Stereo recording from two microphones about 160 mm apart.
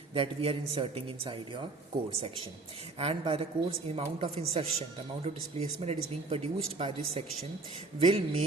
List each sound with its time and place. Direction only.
0.1 s a woman's voice: 35° right (ahead or behind)
3.0 s a woman's voice: 35° right (ahead or behind)